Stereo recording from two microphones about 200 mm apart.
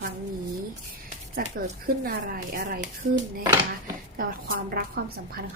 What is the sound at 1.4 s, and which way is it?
A woman's voice, 45° right (ahead or behind).